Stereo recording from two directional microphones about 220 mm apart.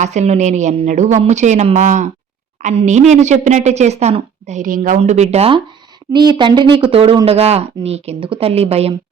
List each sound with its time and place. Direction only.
0.0 s a woman's voice: 30° right (ahead or behind)